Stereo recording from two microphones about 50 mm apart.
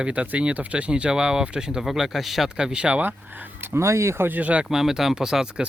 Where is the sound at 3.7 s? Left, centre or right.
Right.